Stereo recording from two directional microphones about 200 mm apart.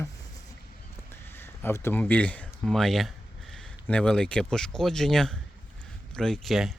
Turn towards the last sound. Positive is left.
turn(degrees=0)  # may be behind; listen again after turning